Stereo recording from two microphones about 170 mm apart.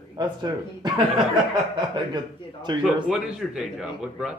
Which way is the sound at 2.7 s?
25° right (ahead or behind).